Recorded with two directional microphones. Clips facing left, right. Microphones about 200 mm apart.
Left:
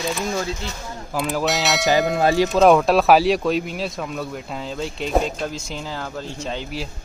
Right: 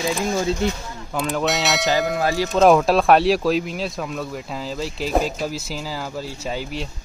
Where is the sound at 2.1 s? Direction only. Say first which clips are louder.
Left 4 dB; 20° left (ahead or behind).